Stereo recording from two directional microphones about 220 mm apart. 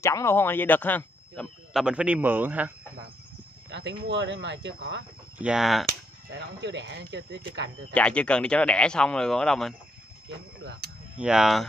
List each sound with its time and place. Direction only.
0.0 s speech: 15° left (ahead or behind); by 2.7 s 10° right (ahead or behind)
4.1 s speech: 55° right (ahead or behind)
5.4 s speech: centre (ahead or behind)
6.3 s speech: 50° right (ahead or behind)
7.9 s speech: 5° left (ahead or behind)
11.1 s speech: 5° right (ahead or behind)